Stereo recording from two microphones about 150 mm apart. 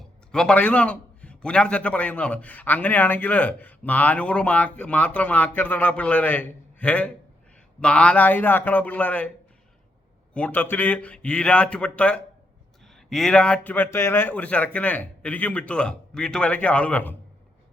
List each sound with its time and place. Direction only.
0.3 s a man's voice: 5° left (ahead or behind)
10.3 s a man's voice: 10° left (ahead or behind)